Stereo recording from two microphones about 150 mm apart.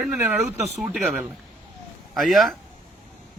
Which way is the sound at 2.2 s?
Centre (ahead or behind).